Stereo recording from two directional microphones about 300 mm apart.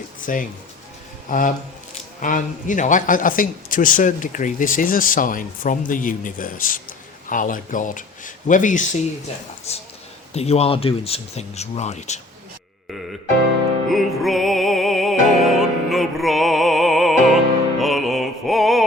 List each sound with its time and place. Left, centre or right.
0.3 s a man's voice: left
13.9 s music: centre